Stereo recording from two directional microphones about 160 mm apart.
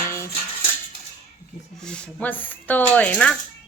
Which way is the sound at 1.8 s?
5° left (ahead or behind).